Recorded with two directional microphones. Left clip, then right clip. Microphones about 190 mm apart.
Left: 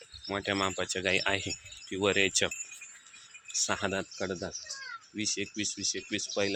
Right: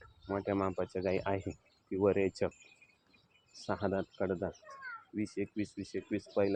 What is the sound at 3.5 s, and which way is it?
Speech, 10° left (ahead or behind).